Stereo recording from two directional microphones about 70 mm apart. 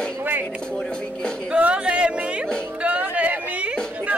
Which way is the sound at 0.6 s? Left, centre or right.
Centre.